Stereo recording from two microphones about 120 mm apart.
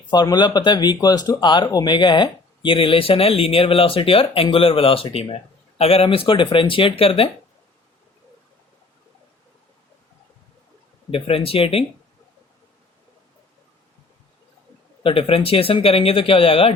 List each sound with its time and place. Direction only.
0.1 s speech: 35° left (ahead or behind)
11.1 s speech: 50° left (ahead or behind)
15.0 s speech: 50° left (ahead or behind)